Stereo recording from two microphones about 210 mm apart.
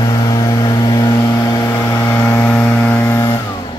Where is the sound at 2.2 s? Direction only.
10° left (ahead or behind).